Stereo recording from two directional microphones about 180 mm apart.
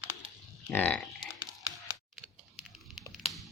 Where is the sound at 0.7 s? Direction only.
10° left (ahead or behind).